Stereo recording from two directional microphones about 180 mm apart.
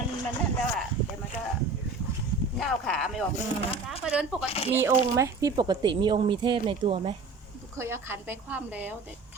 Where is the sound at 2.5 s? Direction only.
5° left (ahead or behind).